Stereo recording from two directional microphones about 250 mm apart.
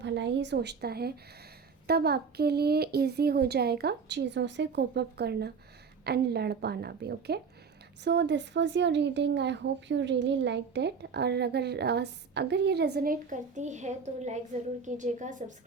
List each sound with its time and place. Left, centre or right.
0.0 s a woman's voice: right